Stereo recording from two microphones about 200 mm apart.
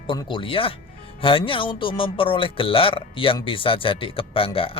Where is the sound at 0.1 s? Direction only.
25° left (ahead or behind).